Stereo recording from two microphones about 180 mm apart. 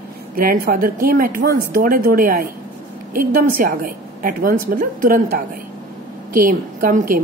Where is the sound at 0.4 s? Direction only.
55° right (ahead or behind).